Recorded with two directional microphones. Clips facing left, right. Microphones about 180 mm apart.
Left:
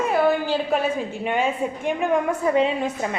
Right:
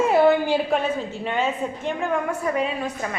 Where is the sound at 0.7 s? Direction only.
10° left (ahead or behind).